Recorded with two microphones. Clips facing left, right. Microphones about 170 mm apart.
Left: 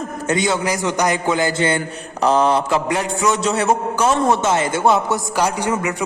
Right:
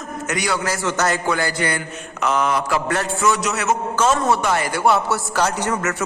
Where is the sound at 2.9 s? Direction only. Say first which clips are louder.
Left 1 dB; 15° left (ahead or behind).